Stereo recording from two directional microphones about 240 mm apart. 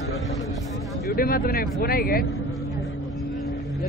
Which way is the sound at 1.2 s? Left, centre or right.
Left.